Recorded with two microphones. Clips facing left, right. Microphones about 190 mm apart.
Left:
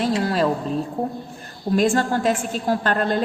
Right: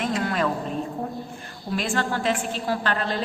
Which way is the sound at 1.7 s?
45° left (ahead or behind).